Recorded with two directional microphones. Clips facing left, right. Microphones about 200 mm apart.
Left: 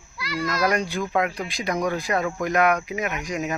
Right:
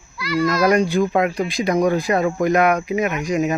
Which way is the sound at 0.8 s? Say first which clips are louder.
Right 6 dB; 25° right (ahead or behind).